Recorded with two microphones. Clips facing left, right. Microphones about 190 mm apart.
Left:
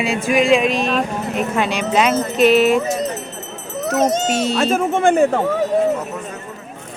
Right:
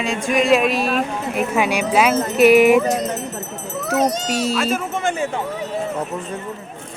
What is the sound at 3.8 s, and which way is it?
Children playing, 50° left (ahead or behind).